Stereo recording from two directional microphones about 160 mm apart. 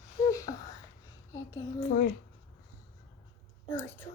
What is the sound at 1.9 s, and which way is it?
Speech, 75° left (ahead or behind).